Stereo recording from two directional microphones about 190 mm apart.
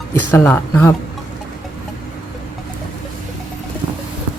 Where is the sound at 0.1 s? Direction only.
10° left (ahead or behind).